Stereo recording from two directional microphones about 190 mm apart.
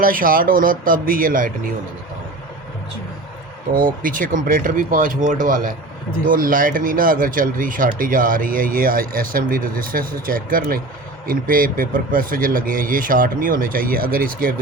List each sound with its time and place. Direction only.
0.0 s speech: 45° right (ahead or behind)
3.8 s speech: 45° right (ahead or behind)